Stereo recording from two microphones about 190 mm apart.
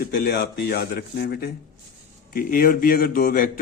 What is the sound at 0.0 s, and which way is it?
A man's voice, 55° left (ahead or behind).